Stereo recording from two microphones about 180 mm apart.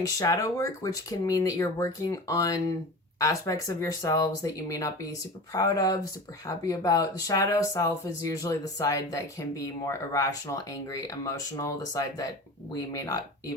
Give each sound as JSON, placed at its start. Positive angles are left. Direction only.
{"t": 0.0, "sound": "speech", "side_deg": 20}